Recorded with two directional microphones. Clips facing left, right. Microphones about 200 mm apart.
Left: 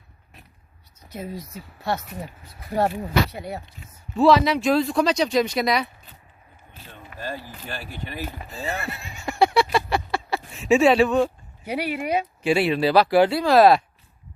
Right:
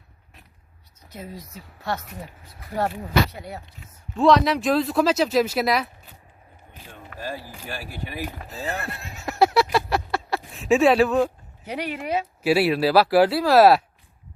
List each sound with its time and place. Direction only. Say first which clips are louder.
1.5 s speech: left 1 dB; 5° left (ahead or behind)
2.6 s speech: left 3 dB; 25° left (ahead or behind)
2.9 s speech: even; 10° left (ahead or behind)
6.7 s a sound: right 1 dB; 10° right (ahead or behind)
7.2 s speech: even; 10° right (ahead or behind)
8.4 s horse: even; centre (ahead or behind)
9.7 s a sound: even; centre (ahead or behind)
11.6 s speech: left 3 dB; 10° left (ahead or behind)
12.4 s speech: right 2 dB; 5° right (ahead or behind)